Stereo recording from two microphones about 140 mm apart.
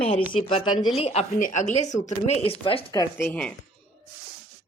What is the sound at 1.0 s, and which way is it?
Speech, 50° left (ahead or behind).